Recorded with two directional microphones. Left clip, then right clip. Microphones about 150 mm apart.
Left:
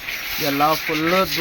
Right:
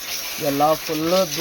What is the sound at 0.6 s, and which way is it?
Speech, 5° left (ahead or behind).